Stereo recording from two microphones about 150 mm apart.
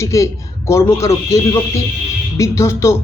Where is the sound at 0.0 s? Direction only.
20° left (ahead or behind).